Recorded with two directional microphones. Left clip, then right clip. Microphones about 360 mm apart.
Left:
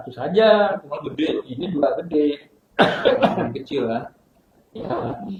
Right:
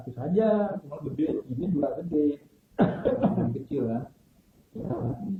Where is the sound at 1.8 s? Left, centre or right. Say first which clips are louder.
Left 10 dB; centre.